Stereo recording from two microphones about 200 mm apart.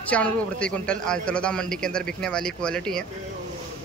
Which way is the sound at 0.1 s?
5° left (ahead or behind).